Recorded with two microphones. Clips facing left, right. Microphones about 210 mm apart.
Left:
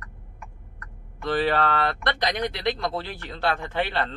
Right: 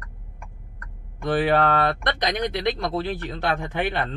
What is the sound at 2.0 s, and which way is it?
Speech, 20° right (ahead or behind).